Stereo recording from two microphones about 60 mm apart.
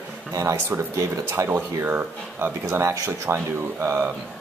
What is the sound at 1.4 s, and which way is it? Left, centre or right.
Speech, right.